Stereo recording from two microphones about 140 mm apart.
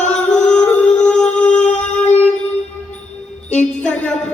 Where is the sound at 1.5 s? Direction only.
55° left (ahead or behind).